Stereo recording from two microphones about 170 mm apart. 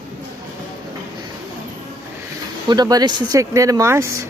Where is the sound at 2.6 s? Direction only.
25° right (ahead or behind).